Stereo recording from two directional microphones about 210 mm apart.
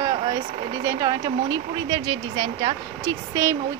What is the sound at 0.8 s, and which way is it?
Speech, 20° right (ahead or behind).